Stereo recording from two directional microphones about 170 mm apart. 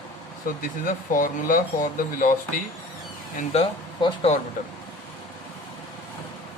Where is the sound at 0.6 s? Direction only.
50° left (ahead or behind).